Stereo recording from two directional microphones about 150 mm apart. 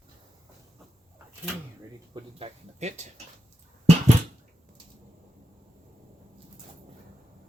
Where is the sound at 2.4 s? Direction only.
45° right (ahead or behind).